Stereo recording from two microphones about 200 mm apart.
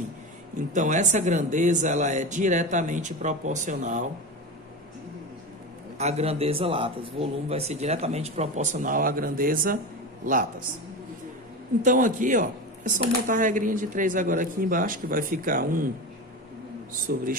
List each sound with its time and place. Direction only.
0.7 s speech: 35° right (ahead or behind)
5.9 s speech: 35° right (ahead or behind)
11.8 s speech: 40° right (ahead or behind)
17.1 s a man's voice: 50° right (ahead or behind)